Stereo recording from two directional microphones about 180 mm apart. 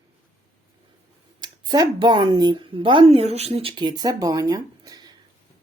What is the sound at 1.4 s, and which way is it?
A woman's voice, 20° right (ahead or behind).